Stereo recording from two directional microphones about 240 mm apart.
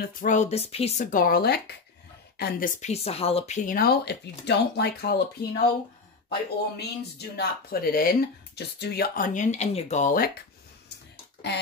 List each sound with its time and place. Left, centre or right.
0.0 s speech: left
2.8 s speech: left
6.8 s speech: left
11.4 s a sound: left